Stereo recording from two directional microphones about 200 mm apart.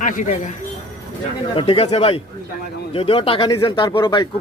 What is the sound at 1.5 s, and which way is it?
Speech, 30° left (ahead or behind).